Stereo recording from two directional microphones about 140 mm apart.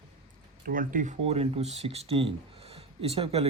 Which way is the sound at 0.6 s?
75° right (ahead or behind).